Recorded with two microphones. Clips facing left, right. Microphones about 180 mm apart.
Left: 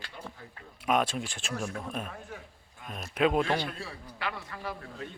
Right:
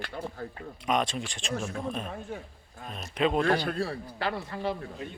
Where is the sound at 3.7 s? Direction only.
35° right (ahead or behind).